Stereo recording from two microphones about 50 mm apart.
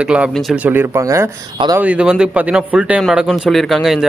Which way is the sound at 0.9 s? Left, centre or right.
Right.